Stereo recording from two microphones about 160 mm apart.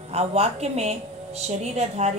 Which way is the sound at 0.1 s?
40° right (ahead or behind).